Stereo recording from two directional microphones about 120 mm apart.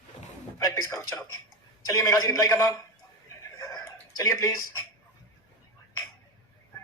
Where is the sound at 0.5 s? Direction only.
25° left (ahead or behind).